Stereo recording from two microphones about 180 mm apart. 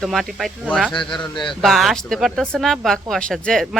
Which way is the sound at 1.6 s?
Centre (ahead or behind).